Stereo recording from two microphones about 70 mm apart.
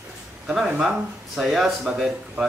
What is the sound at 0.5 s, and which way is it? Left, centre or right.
Speech, centre.